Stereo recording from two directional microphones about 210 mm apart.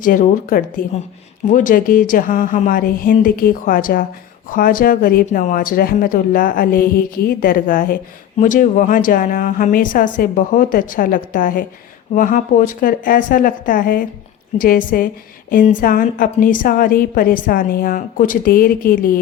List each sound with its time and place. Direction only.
0.0 s a woman's voice: 40° left (ahead or behind)